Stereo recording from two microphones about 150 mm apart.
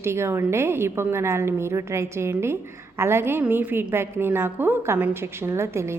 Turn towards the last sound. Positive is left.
turn(degrees=-15)  # may be behind; listen again after turning